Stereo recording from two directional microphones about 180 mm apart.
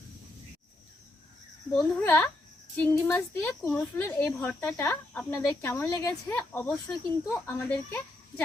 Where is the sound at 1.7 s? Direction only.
5° left (ahead or behind).